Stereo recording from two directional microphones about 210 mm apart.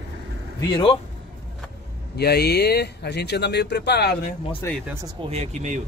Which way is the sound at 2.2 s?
50° left (ahead or behind).